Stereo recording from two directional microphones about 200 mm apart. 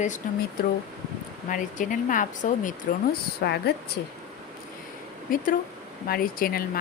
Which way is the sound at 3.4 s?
55° left (ahead or behind).